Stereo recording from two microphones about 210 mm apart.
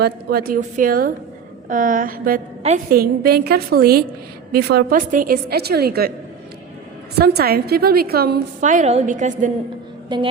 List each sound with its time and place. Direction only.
0.0 s a woman's voice: 45° right (ahead or behind)
7.2 s a woman's voice: 50° right (ahead or behind)
10.1 s a woman's voice: 20° right (ahead or behind)